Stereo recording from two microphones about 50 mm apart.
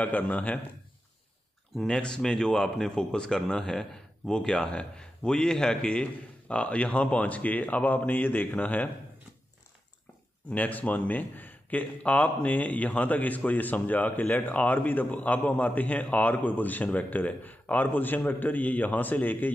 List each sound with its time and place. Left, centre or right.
0.0 s speech: left
1.8 s speech: centre
4.5 s a man's voice: centre
10.5 s speech: left